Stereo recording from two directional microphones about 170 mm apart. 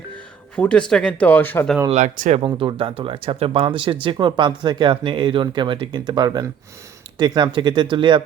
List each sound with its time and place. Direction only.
0.5 s speech: 5° left (ahead or behind)
1.9 s speech: 45° right (ahead or behind)
2.5 s speech: 30° right (ahead or behind)